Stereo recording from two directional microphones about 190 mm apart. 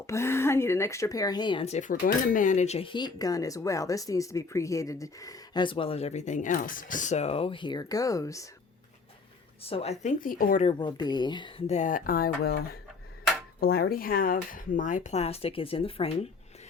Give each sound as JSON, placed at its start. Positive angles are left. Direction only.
{"t": 0.1, "sound": "speech", "side_deg": 15}
{"t": 9.6, "sound": "speech", "side_deg": 30}
{"t": 10.6, "sound": "speech", "side_deg": 30}